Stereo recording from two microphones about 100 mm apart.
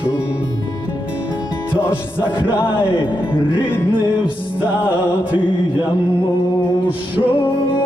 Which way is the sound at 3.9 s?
10° right (ahead or behind).